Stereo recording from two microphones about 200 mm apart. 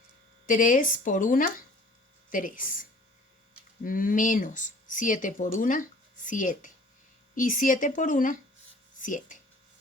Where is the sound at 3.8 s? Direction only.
45° left (ahead or behind).